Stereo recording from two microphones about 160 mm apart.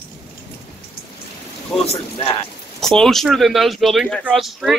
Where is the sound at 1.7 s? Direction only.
5° left (ahead or behind).